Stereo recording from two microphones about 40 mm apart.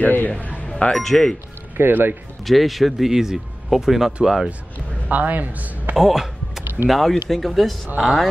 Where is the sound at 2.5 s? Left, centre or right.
Centre.